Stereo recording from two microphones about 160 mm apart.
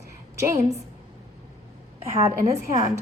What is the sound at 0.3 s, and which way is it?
Speech, 20° right (ahead or behind).